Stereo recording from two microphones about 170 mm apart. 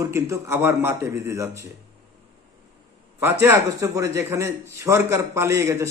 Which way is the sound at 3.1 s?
15° right (ahead or behind).